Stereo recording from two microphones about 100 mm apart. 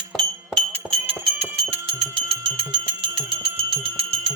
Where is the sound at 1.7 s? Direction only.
75° right (ahead or behind).